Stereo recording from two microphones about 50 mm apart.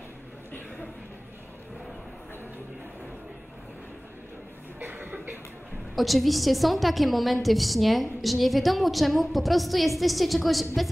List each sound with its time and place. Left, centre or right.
4.7 s cough: right
5.9 s a woman's voice: centre